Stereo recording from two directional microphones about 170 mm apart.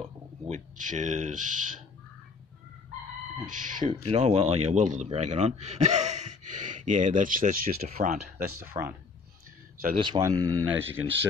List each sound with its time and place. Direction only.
0.5 s a man's voice: 50° right (ahead or behind)
3.4 s a man's voice: 50° right (ahead or behind)
4.0 s a man's voice: 35° right (ahead or behind); by 8.8 s 65° right (ahead or behind)
9.9 s speech: 25° right (ahead or behind)
10.7 s speech: 10° right (ahead or behind)